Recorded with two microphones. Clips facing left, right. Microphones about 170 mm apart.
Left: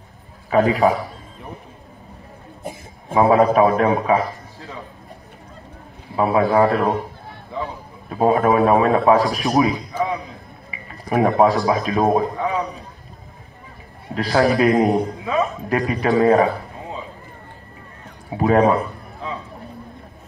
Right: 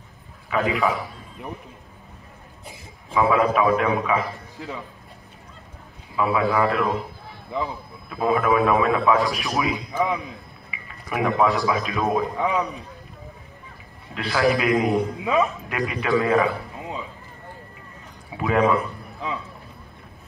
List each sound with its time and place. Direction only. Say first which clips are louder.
0.5 s a man's voice: left 6 dB; 35° left (ahead or behind)
2.6 s a man's voice: left 10 dB; 45° left (ahead or behind)
6.1 s a man's voice: left 5 dB; 40° left (ahead or behind)
8.1 s a man's voice: left 4 dB; 40° left (ahead or behind)
14.1 s a man's voice: left 4 dB; 40° left (ahead or behind)
18.3 s a man's voice: left 5 dB; 35° left (ahead or behind)